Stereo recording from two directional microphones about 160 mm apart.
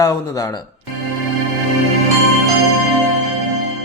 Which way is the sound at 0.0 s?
20° left (ahead or behind).